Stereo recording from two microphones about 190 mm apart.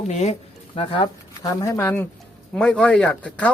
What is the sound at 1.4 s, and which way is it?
Speech, 20° left (ahead or behind).